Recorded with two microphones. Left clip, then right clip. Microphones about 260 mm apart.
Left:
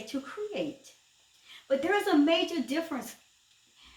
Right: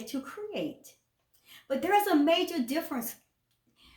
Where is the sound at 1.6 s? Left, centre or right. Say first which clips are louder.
Right 1 dB; right.